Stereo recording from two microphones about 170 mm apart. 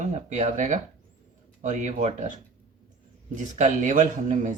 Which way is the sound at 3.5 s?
50° right (ahead or behind).